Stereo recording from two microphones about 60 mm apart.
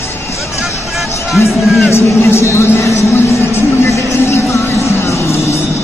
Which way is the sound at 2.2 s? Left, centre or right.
Left.